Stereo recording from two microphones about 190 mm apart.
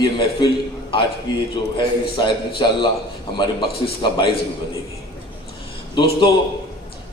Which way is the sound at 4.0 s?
25° left (ahead or behind).